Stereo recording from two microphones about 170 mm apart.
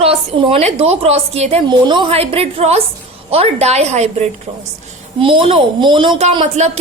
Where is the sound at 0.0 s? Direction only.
35° right (ahead or behind).